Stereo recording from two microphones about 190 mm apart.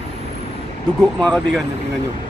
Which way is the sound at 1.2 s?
5° left (ahead or behind).